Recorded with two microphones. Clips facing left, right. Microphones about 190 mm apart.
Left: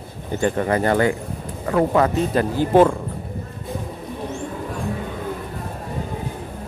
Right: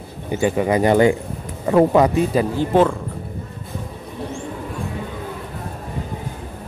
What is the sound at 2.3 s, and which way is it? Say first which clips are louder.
Speech: even; 5° right (ahead or behind).